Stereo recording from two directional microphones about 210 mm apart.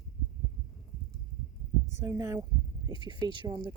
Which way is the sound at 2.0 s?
10° right (ahead or behind).